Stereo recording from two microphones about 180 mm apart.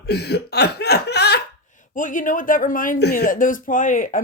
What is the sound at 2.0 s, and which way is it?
Speech, 45° left (ahead or behind).